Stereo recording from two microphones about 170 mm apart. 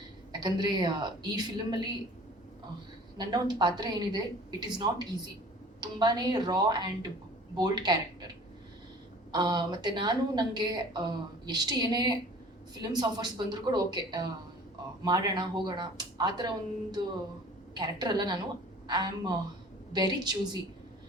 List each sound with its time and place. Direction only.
0.3 s a woman's voice: 25° right (ahead or behind)
3.2 s a woman's voice: 25° right (ahead or behind)
9.3 s a woman's voice: 25° right (ahead or behind)